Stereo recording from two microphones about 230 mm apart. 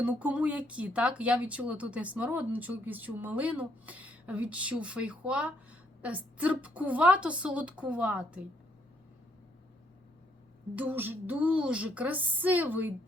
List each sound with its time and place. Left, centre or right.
0.0 s speech: centre
10.8 s speech: centre